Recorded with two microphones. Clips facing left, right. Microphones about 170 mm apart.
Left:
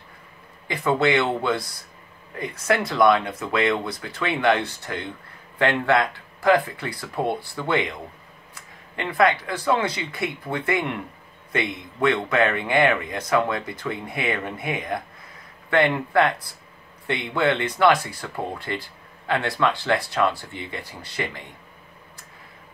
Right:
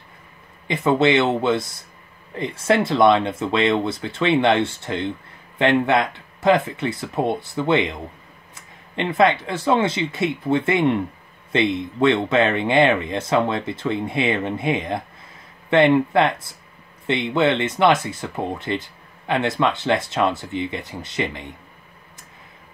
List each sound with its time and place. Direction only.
0.7 s speech: 20° right (ahead or behind)